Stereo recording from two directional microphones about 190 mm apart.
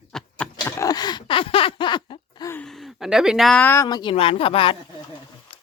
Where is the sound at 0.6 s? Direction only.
15° left (ahead or behind).